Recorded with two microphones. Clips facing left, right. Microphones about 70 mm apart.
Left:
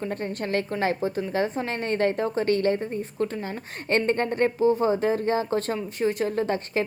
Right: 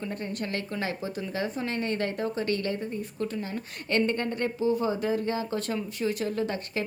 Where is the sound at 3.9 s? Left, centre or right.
Left.